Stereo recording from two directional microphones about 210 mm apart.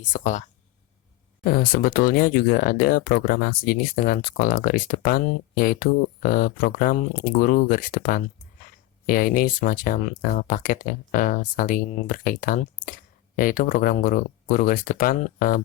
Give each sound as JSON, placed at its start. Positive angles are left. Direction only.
{"t": 0.0, "sound": "speech", "side_deg": 35}
{"t": 1.5, "sound": "speech", "side_deg": 45}